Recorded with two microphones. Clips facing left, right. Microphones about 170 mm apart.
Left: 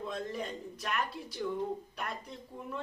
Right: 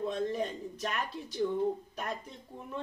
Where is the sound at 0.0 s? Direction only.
20° right (ahead or behind).